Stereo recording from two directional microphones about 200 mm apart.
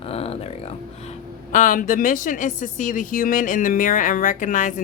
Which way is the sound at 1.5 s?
40° left (ahead or behind).